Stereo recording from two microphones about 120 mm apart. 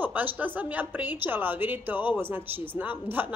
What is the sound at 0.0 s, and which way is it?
A woman's voice, 15° right (ahead or behind).